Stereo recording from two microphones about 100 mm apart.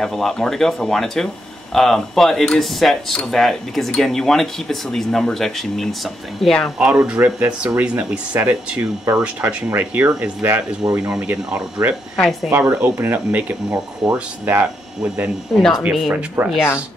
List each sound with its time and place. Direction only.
0.0 s speech: 5° left (ahead or behind)
6.8 s speech: 15° right (ahead or behind)
15.5 s speech: centre (ahead or behind)